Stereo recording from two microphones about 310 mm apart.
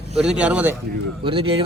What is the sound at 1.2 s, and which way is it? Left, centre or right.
Speech, centre.